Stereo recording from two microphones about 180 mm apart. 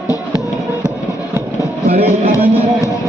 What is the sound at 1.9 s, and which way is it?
Music, 35° right (ahead or behind).